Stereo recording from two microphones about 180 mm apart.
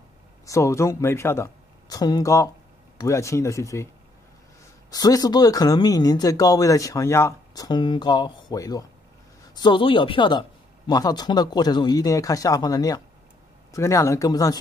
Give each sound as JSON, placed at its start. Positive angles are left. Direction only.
{"t": 0.5, "sound": "speech", "side_deg": 15}
{"t": 4.9, "sound": "speech", "side_deg": 20}